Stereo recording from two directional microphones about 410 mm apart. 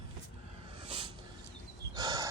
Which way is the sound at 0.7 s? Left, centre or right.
Centre.